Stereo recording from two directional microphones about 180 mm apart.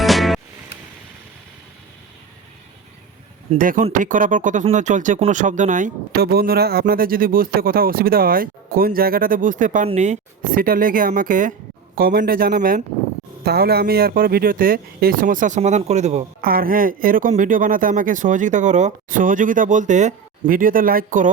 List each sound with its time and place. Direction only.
0.0 s music: centre (ahead or behind)
3.5 s speech: 45° right (ahead or behind)
6.2 s speech: 60° right (ahead or behind); by 16.2 s 40° right (ahead or behind)
16.4 s speech: 55° right (ahead or behind)